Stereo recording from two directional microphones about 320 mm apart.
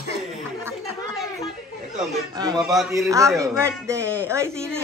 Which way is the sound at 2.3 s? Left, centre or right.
Centre.